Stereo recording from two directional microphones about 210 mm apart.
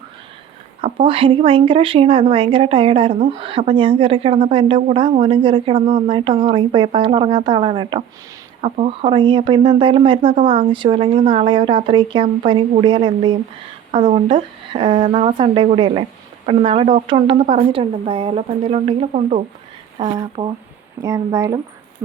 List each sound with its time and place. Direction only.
0.8 s speech: 25° right (ahead or behind)
20.0 s speech: 20° right (ahead or behind)